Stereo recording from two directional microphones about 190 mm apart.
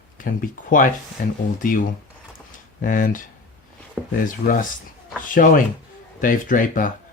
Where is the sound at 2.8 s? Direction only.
45° left (ahead or behind).